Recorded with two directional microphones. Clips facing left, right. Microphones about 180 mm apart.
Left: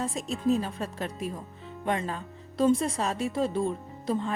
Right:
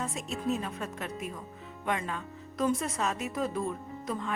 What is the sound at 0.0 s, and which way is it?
Speech, 35° left (ahead or behind).